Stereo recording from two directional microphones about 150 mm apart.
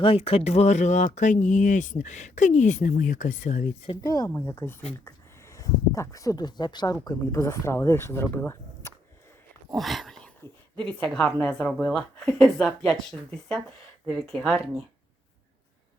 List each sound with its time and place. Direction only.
0.0 s speech: 40° left (ahead or behind); by 3.7 s 60° left (ahead or behind)
4.0 s speech: 20° left (ahead or behind)
9.7 s a sound: centre (ahead or behind)
10.8 s a woman's voice: 5° left (ahead or behind)